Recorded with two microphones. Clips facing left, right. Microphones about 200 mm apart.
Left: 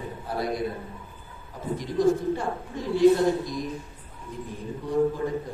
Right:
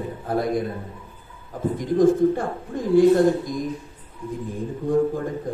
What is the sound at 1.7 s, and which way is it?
A man's voice, 50° right (ahead or behind).